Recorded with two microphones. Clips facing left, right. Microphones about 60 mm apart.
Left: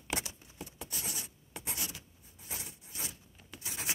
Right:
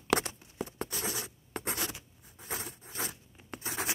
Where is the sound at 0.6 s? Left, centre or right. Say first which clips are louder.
Right 8 dB; right.